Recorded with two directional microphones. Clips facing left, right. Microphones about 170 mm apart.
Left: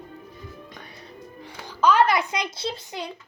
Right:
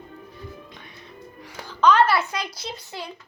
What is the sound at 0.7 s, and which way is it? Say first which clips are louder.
Music: left 2 dB; 40° left (ahead or behind).